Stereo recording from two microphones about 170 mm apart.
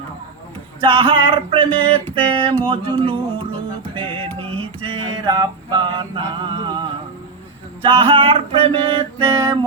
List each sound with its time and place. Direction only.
0.8 s music: 30° right (ahead or behind)